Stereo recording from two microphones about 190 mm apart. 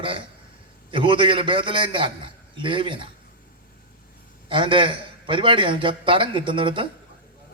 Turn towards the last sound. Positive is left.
turn(degrees=-25)  # may be behind; listen again after turning